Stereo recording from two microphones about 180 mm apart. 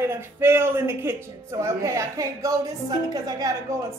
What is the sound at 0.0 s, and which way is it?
A woman's voice, 15° right (ahead or behind).